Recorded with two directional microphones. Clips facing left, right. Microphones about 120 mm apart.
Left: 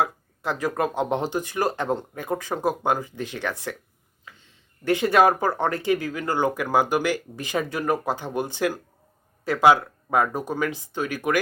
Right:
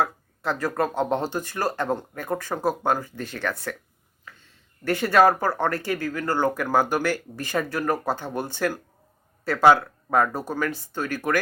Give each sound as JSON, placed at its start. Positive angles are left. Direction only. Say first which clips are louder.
{"t": 0.0, "sound": "speech", "louder": "even", "side_deg": 15}